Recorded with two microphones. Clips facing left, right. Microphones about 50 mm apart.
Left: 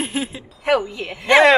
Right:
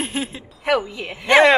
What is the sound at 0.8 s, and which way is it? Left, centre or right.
Speech, centre.